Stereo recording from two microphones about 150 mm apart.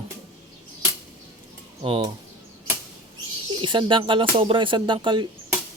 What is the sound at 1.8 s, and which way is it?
Speech, 35° right (ahead or behind).